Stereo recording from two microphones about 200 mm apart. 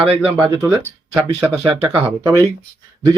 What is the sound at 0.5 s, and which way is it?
Speech, 15° right (ahead or behind).